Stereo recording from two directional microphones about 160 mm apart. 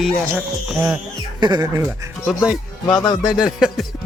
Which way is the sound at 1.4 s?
25° right (ahead or behind).